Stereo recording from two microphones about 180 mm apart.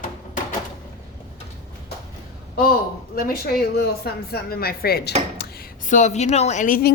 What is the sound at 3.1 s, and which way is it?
Speech, 60° left (ahead or behind).